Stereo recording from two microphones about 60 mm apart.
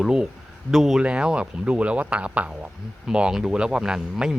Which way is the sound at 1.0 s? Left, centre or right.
Centre.